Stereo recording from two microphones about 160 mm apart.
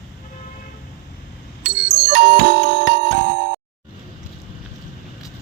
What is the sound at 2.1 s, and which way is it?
Music, 70° right (ahead or behind).